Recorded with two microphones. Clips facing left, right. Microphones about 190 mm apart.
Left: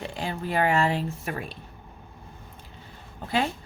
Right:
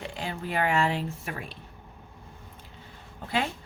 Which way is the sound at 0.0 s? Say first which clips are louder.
Left 3 dB; 35° left (ahead or behind).